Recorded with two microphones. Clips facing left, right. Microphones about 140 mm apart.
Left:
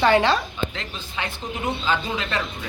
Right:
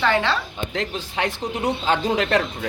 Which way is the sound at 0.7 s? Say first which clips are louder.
Right 7 dB; 65° right (ahead or behind).